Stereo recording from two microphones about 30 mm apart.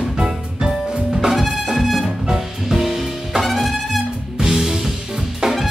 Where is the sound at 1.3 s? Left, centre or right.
Centre.